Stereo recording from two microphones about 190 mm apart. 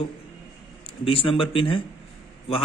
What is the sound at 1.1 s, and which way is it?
Speech, 30° left (ahead or behind).